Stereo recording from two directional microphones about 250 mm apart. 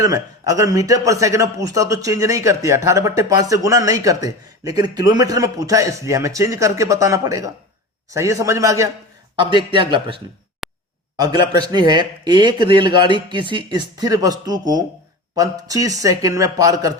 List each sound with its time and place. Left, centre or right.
0.0 s a man's voice: centre
10.6 s a sound: centre
11.2 s a man's voice: centre